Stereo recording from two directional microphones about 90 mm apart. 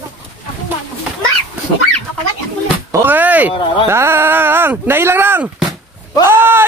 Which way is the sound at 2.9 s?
20° right (ahead or behind).